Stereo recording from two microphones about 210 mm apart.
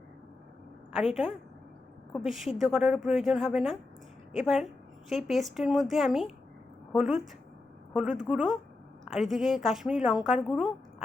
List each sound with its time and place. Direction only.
0.9 s a woman's voice: centre (ahead or behind)